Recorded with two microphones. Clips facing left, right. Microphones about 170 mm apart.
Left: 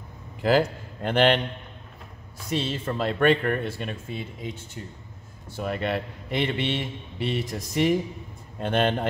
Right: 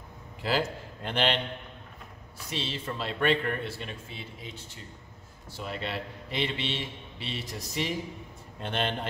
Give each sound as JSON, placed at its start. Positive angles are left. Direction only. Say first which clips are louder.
{"t": 0.4, "sound": "a man's voice", "louder": "left 8 dB", "side_deg": 50}
{"t": 2.5, "sound": "a man's voice", "louder": "left 7 dB", "side_deg": 50}
{"t": 5.6, "sound": "a man's voice", "louder": "left 7 dB", "side_deg": 55}